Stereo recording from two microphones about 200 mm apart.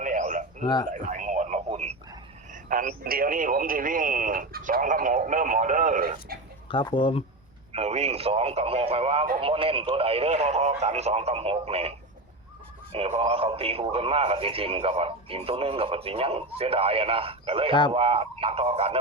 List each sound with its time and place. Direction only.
0.0 s a sound: 40° right (ahead or behind)
0.6 s speech: 20° left (ahead or behind)
0.9 s radio: 40° right (ahead or behind)
2.5 s speech: 45° right (ahead or behind)
6.7 s speech: 25° left (ahead or behind)
7.7 s speech: 30° right (ahead or behind)